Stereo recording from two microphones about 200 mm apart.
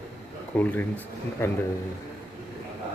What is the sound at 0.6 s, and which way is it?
Speech, 10° left (ahead or behind).